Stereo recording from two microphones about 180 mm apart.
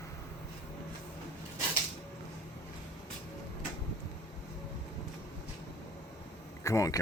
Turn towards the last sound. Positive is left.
turn(degrees=20)  # may be behind; listen again after turning